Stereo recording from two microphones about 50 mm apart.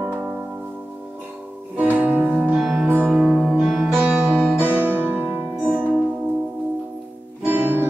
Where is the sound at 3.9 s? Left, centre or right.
Right.